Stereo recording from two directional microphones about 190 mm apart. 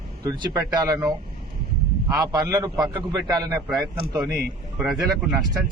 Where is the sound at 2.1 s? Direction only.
20° right (ahead or behind).